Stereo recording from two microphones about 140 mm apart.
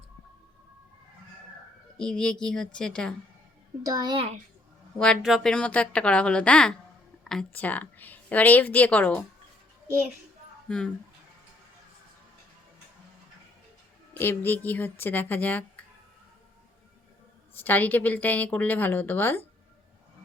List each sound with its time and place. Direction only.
2.0 s a woman's voice: 5° left (ahead or behind)
3.8 s a child's voice: 25° right (ahead or behind)
4.9 s a woman's voice: 5° left (ahead or behind)
10.7 s a woman's voice: 5° left (ahead or behind)
14.1 s a woman's voice: 15° left (ahead or behind)
17.5 s a woman's voice: 15° left (ahead or behind)